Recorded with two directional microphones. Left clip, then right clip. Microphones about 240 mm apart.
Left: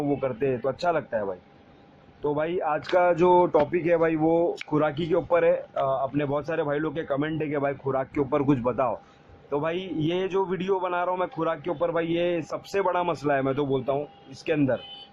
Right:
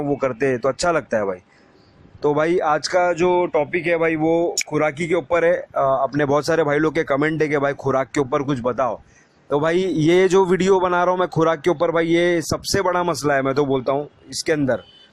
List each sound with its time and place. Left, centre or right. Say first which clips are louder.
0.0 s speech: right 6 dB; right
9.5 s speech: right 9 dB; right